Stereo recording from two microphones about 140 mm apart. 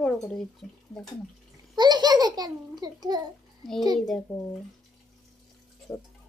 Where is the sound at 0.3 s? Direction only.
5° left (ahead or behind).